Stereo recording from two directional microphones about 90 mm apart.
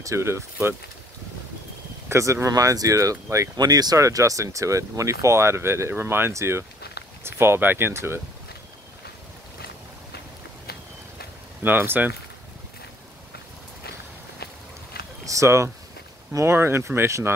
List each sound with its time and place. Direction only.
0.0 s speech: 30° right (ahead or behind)
2.0 s speech: 30° right (ahead or behind)
11.6 s speech: 20° right (ahead or behind)
15.2 s speech: 35° right (ahead or behind)